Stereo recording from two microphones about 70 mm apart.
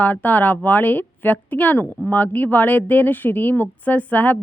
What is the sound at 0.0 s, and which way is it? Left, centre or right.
Speech, left.